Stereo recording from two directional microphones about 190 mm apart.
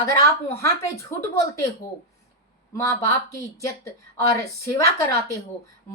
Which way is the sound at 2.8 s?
15° left (ahead or behind).